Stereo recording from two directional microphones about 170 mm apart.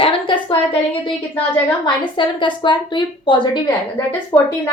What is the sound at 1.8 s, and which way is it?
A woman's voice, 30° left (ahead or behind).